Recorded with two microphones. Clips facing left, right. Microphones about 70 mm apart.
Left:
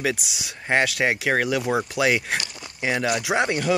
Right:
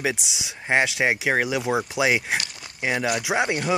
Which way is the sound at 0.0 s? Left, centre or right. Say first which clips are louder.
Left 1 dB; centre.